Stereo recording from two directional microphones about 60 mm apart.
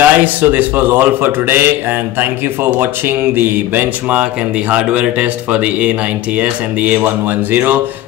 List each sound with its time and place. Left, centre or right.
0.0 s a man's voice: right